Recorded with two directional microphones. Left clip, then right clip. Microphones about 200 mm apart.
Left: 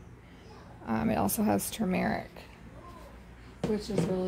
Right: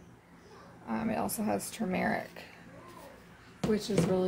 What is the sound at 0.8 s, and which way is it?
Speech, 45° left (ahead or behind).